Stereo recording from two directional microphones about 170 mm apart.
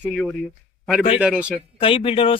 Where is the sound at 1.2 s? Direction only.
5° right (ahead or behind).